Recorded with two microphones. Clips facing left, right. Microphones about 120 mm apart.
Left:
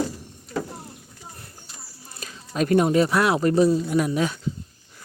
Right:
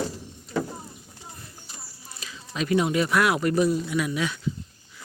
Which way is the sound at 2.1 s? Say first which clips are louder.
Left 3 dB; 45° left (ahead or behind).